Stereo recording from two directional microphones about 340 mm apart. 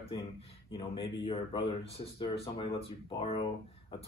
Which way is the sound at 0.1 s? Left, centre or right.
Centre.